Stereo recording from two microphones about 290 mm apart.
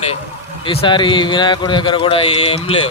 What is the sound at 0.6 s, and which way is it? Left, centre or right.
A man's voice, centre.